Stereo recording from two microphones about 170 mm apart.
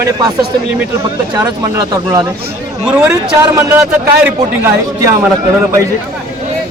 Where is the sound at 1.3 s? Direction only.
20° right (ahead or behind).